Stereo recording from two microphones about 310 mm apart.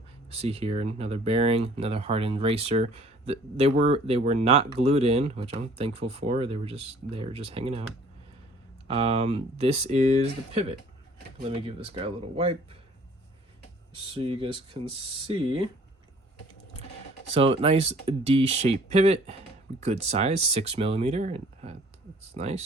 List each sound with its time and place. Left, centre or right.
0.3 s speech: centre
8.9 s speech: centre
14.0 s speech: centre
17.3 s speech: centre